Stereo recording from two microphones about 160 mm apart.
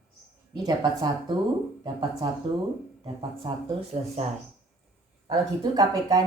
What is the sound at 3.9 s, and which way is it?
Speech, 45° right (ahead or behind).